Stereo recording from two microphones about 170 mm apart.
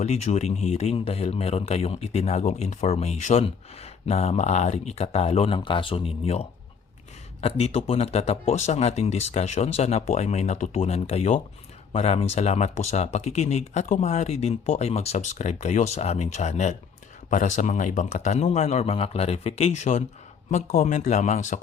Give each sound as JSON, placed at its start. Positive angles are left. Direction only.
{"t": 0.0, "sound": "speech", "side_deg": 40}